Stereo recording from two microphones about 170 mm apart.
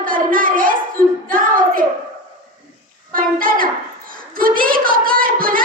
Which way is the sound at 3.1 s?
55° right (ahead or behind).